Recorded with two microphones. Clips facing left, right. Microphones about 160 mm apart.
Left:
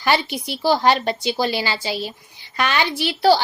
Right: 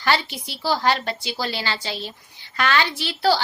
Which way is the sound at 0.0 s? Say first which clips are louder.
Left 3 dB; 15° left (ahead or behind).